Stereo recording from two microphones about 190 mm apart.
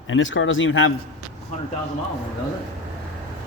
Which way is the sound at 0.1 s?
90° left.